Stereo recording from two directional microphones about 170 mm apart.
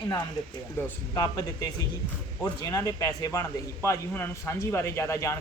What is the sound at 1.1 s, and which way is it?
A man's voice, 20° left (ahead or behind).